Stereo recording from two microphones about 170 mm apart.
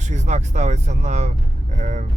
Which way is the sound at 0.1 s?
45° right (ahead or behind).